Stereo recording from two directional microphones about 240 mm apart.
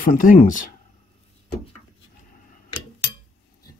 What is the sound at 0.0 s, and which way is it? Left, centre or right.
Speech, left.